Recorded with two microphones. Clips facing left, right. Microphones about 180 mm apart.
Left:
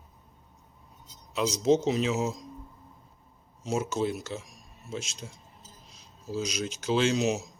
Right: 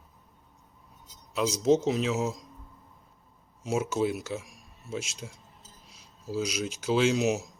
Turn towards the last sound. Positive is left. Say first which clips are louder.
# right 1 dB
turn(degrees=-5)  # may be behind; listen again after turning